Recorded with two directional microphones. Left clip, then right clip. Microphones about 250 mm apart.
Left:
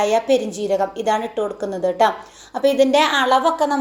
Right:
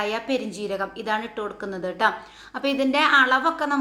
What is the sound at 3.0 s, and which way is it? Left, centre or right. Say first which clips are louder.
Speech: left 2 dB; centre.